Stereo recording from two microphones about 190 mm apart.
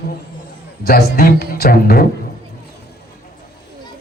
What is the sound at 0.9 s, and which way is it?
A woman's voice, 55° left (ahead or behind).